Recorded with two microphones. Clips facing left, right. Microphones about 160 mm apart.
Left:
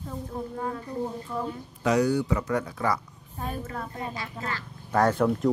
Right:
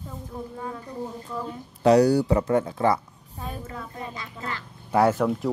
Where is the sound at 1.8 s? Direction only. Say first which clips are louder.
Right 6 dB; 35° right (ahead or behind).